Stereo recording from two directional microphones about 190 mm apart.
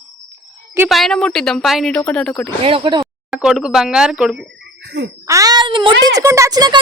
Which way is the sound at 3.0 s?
Centre (ahead or behind).